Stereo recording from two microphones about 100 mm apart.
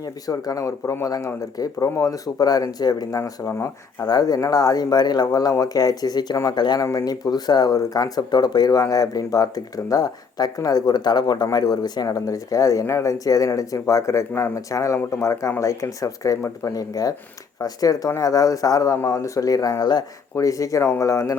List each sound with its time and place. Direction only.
0.3 s speech: 35° left (ahead or behind)
3.2 s speech: 30° left (ahead or behind)
4.0 s speech: 40° left (ahead or behind)
20.3 s speech: 35° left (ahead or behind)